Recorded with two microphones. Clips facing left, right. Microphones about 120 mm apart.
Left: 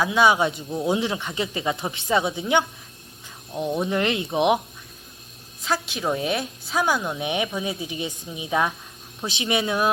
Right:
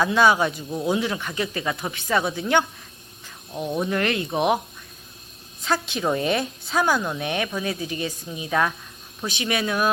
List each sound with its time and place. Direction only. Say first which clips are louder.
0.0 s a woman's voice: even; 15° left (ahead or behind)
3.8 s a woman's voice: even; 20° left (ahead or behind)
5.6 s a woman's voice: right 1 dB; 5° left (ahead or behind); by 9.9 s 20° left (ahead or behind)